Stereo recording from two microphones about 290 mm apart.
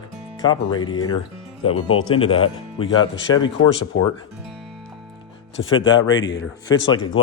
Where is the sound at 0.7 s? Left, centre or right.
Centre.